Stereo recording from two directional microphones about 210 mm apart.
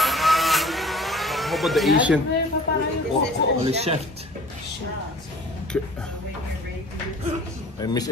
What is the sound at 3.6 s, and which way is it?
Speech, 30° right (ahead or behind).